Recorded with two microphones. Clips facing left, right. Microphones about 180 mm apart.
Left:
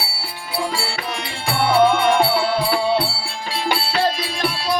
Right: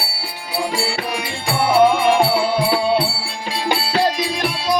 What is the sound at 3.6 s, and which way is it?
Music, 15° right (ahead or behind).